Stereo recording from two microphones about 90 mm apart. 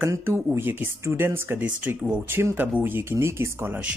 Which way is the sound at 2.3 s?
25° right (ahead or behind).